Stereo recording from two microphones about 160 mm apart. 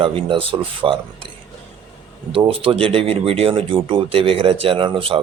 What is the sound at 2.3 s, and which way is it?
Speech, 35° right (ahead or behind).